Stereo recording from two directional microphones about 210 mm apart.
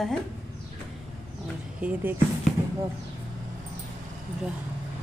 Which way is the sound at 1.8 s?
5° right (ahead or behind).